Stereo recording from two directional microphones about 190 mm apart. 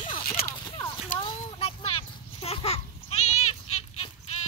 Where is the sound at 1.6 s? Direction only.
30° left (ahead or behind).